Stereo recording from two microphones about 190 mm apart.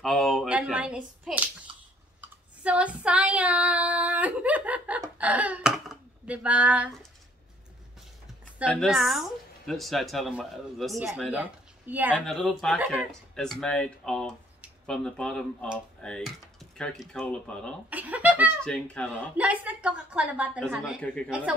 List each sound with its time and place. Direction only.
0.0 s speech: centre (ahead or behind)
2.6 s child singing: 5° right (ahead or behind)
8.6 s a woman's voice: centre (ahead or behind)
12.3 s speech: 5° left (ahead or behind)
12.7 s a woman's voice: 10° right (ahead or behind)
13.1 s speech: 5° left (ahead or behind)
17.8 s speech: 10° right (ahead or behind)
18.6 s speech: 5° left (ahead or behind)
19.3 s a woman's voice: 10° right (ahead or behind)